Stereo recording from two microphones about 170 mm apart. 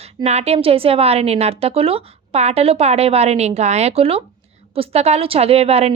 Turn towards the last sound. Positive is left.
turn(degrees=-40)  # may be behind; listen again after turning